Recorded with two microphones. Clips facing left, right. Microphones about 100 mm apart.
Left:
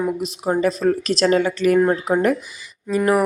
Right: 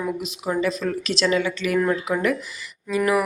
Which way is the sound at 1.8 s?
30° left (ahead or behind).